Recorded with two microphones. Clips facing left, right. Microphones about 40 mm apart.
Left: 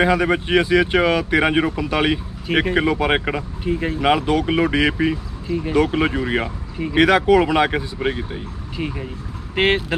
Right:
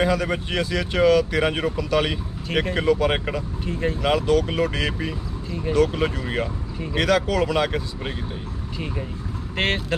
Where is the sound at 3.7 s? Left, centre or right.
Centre.